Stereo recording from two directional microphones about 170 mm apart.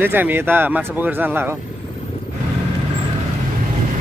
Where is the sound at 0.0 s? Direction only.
10° right (ahead or behind).